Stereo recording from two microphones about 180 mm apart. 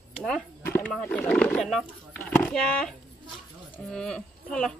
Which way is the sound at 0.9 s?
5° left (ahead or behind).